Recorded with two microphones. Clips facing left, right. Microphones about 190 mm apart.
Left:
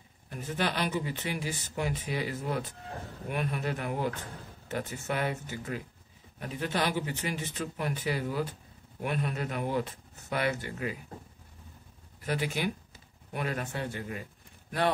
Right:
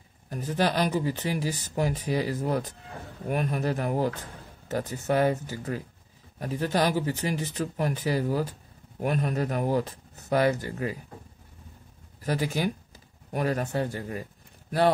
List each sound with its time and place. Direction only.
0.3 s speech: 40° right (ahead or behind)
12.2 s speech: 40° right (ahead or behind)